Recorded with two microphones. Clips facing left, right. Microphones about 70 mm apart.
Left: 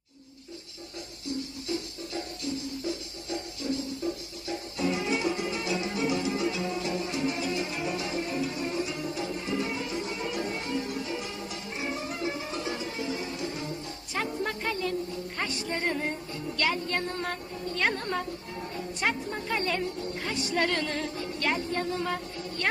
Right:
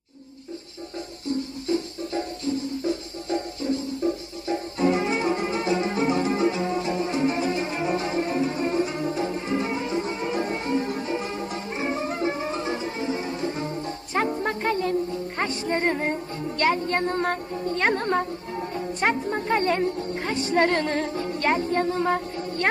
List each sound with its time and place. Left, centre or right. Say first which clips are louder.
1.3 s music: right 7 dB; right